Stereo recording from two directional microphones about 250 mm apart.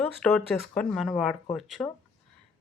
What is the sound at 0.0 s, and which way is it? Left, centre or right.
Speech, centre.